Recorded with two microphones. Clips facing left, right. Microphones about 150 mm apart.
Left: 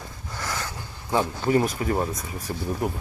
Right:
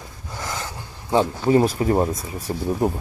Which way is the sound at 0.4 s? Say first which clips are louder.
Right 1 dB; 20° right (ahead or behind).